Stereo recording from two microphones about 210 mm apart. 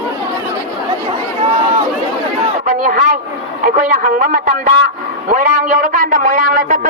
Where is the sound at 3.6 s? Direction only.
40° right (ahead or behind).